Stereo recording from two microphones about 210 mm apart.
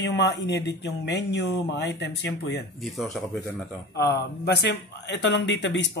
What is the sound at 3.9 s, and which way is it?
Speech, 55° left (ahead or behind).